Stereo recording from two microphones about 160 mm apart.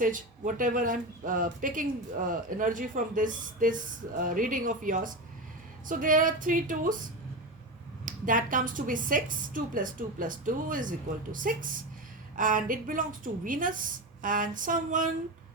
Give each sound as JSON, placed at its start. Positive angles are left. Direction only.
{"t": 0.0, "sound": "speech", "side_deg": -55}
{"t": 8.0, "sound": "speech", "side_deg": -55}